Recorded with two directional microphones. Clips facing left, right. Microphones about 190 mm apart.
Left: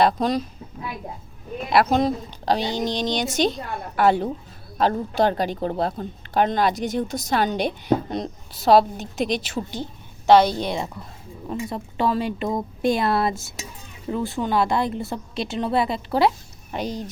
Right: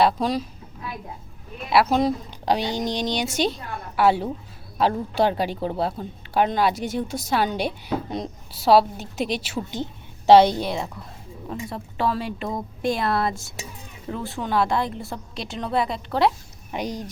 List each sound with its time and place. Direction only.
0.0 s speech: 5° right (ahead or behind)
1.7 s speech: 5° right (ahead or behind)
10.2 s a woman's voice: 30° right (ahead or behind)
10.6 s a woman's voice: centre (ahead or behind)
16.7 s speech: 15° right (ahead or behind)